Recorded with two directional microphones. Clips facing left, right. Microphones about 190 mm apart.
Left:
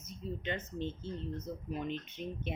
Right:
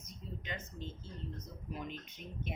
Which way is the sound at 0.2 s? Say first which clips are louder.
Left 8 dB; 30° left (ahead or behind).